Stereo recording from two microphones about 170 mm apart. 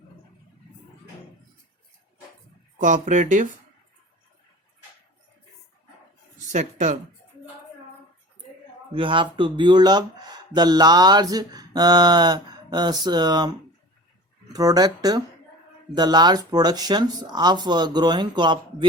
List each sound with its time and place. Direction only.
2.8 s speech: 45° right (ahead or behind)
6.4 s a woman's voice: 45° right (ahead or behind)
8.9 s speech: 30° right (ahead or behind)